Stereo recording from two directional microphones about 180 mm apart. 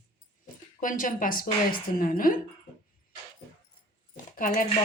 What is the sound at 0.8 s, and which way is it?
A woman's voice, 50° left (ahead or behind).